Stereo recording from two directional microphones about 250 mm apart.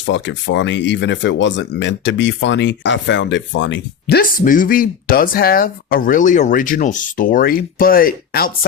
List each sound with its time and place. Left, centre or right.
0.0 s speech: left